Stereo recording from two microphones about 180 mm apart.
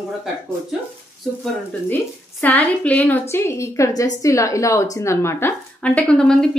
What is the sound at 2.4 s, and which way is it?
A woman's voice, 10° left (ahead or behind).